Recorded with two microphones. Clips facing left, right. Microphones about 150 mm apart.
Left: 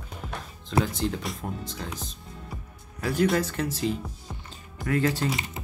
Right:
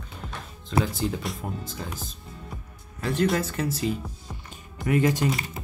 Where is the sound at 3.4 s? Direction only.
5° right (ahead or behind).